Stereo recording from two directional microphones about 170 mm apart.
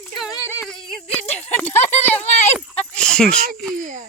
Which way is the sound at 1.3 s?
40° left (ahead or behind).